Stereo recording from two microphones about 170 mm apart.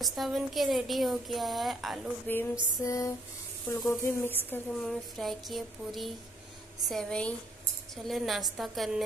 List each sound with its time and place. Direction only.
0.0 s a woman's voice: centre (ahead or behind)
2.2 s speech: 10° left (ahead or behind)
2.8 s a sound: 20° left (ahead or behind)
3.6 s a woman's voice: 15° left (ahead or behind)